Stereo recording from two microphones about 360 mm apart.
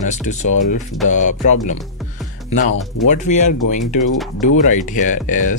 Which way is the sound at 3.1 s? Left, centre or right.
Centre.